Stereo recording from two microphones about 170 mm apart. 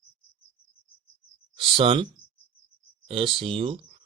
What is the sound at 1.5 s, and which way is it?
Speech, 30° right (ahead or behind).